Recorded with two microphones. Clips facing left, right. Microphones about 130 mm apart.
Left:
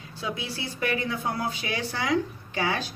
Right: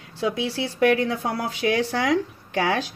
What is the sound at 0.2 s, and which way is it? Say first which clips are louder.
Speech: right 8 dB; 80° right.